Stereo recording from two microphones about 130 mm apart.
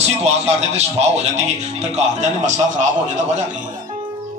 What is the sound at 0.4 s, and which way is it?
Speech, 55° right (ahead or behind).